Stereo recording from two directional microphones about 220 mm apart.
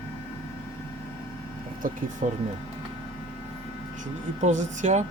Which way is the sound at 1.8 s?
40° right (ahead or behind).